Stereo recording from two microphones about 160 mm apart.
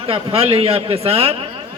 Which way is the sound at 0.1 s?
35° right (ahead or behind).